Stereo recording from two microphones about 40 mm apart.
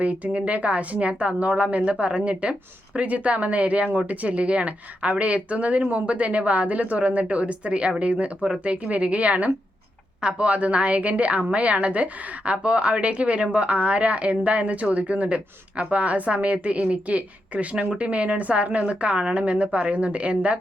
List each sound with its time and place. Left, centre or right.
0.0 s a woman's voice: right